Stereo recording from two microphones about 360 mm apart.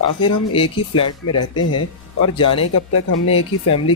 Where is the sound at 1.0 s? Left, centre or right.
Left.